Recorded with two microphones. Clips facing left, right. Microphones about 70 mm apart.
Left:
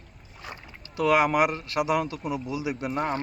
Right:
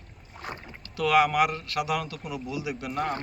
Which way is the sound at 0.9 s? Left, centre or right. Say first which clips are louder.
Left 1 dB; centre.